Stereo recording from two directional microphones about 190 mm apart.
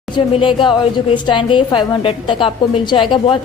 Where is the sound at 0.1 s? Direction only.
25° left (ahead or behind).